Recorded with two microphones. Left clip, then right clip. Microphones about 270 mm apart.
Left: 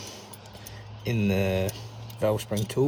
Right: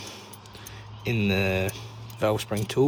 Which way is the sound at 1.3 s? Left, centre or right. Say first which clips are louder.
Right 1 dB; right.